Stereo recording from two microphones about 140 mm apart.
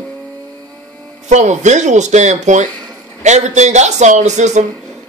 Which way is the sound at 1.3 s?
55° right (ahead or behind).